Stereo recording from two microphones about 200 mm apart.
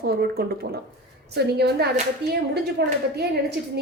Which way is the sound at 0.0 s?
50° right (ahead or behind).